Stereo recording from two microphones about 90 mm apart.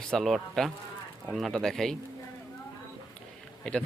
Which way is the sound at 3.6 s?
10° left (ahead or behind).